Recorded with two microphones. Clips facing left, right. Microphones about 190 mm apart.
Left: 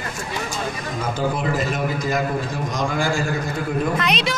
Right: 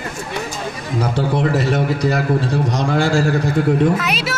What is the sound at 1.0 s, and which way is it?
A man's voice, 75° right (ahead or behind).